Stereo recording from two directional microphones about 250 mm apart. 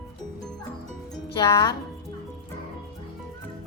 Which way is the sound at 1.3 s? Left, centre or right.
Centre.